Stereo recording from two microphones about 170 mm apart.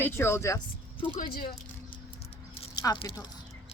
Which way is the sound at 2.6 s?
25° left (ahead or behind).